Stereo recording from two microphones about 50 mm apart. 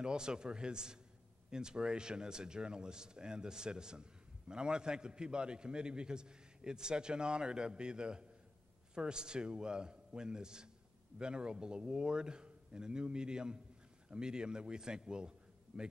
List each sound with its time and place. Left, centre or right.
0.0 s a man's voice: centre